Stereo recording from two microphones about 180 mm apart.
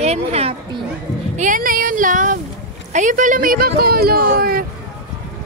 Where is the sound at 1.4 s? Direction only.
45° right (ahead or behind).